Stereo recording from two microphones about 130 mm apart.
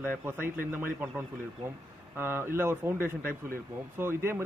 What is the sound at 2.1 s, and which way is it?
A man's voice, 15° right (ahead or behind).